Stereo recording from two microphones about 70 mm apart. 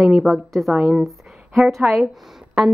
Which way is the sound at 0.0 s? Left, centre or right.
Centre.